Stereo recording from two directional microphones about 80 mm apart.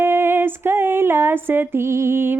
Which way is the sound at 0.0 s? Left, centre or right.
Right.